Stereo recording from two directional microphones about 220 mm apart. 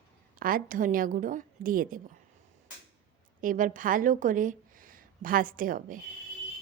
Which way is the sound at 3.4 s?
40° right (ahead or behind).